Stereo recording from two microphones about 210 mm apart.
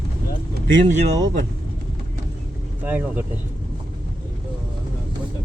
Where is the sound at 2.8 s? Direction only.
10° right (ahead or behind).